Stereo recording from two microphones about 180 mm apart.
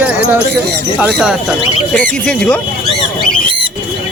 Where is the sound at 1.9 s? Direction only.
5° left (ahead or behind).